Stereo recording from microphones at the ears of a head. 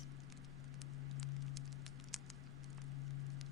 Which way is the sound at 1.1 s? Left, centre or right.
Left.